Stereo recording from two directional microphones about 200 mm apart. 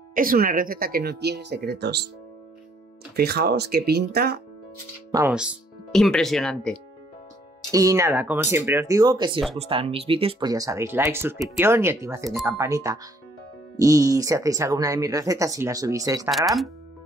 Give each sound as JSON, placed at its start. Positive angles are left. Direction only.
{"t": 0.1, "sound": "speech", "side_deg": -45}
{"t": 3.2, "sound": "speech", "side_deg": -50}
{"t": 5.3, "sound": "speech", "side_deg": -5}
{"t": 7.7, "sound": "speech", "side_deg": -15}
{"t": 16.3, "sound": "speech", "side_deg": 0}